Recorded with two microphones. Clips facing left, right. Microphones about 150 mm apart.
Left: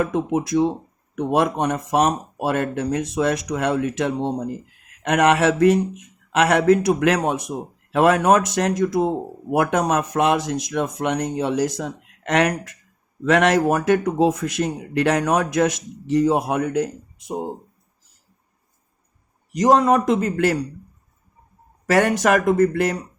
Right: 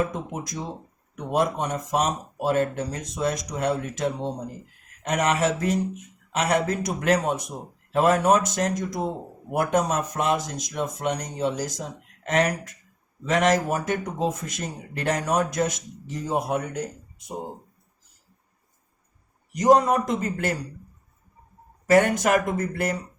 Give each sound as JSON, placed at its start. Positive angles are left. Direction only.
{"t": 0.0, "sound": "speech", "side_deg": 70}
{"t": 19.5, "sound": "speech", "side_deg": 90}
{"t": 21.8, "sound": "speech", "side_deg": 90}